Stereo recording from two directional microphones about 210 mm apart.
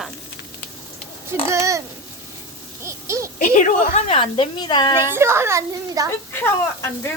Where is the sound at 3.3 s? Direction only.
40° left (ahead or behind); by 5.0 s 20° left (ahead or behind).